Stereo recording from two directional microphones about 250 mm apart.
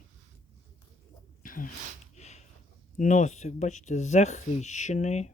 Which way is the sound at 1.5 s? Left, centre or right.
Left.